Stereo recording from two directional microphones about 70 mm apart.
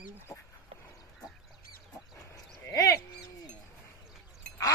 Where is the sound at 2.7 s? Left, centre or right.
Left.